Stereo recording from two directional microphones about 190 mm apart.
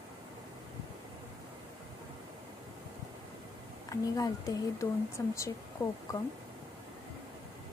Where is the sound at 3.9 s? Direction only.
20° left (ahead or behind).